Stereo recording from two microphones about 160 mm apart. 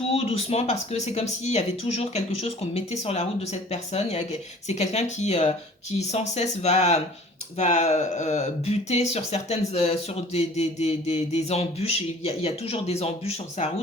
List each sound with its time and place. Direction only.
0.1 s speech: 40° left (ahead or behind)